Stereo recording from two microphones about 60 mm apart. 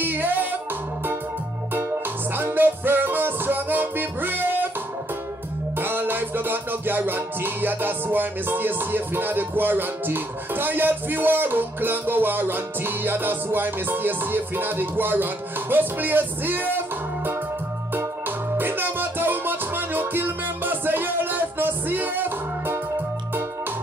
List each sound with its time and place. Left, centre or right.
0.0 s music: right
2.3 s music: right
5.8 s music: right
18.6 s music: right